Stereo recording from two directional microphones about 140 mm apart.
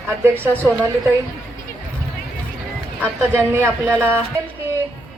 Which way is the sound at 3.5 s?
15° right (ahead or behind).